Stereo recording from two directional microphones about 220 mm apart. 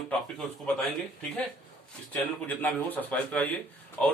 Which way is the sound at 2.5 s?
10° left (ahead or behind).